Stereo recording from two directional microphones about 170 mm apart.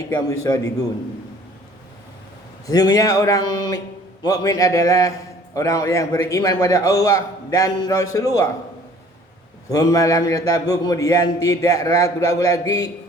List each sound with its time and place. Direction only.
0.3 s a man's voice: 20° left (ahead or behind)
2.6 s a man's voice: 20° left (ahead or behind)
9.6 s a man's voice: 20° left (ahead or behind)